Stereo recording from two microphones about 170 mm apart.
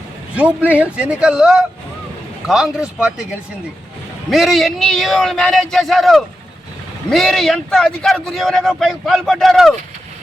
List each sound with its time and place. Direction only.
0.3 s a man's voice: 10° right (ahead or behind)